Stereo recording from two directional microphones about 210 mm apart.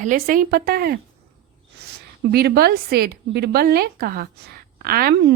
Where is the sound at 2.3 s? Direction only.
50° right (ahead or behind).